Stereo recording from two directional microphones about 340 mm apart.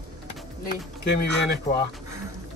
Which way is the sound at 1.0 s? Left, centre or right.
Left.